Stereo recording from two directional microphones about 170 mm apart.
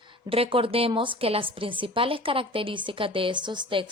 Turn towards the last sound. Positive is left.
turn(degrees=-30)  # may be behind; listen again after turning